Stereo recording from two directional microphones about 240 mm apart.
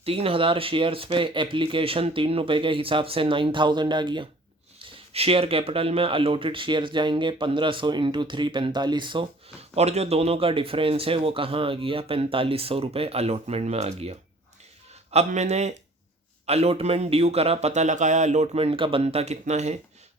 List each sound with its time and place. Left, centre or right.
0.0 s speech: right
15.1 s speech: right